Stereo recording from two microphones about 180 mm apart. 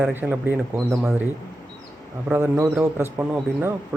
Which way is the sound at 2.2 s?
10° right (ahead or behind).